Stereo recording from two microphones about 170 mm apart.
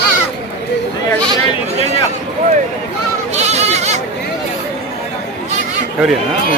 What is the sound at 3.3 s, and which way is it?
Goat, 40° right (ahead or behind).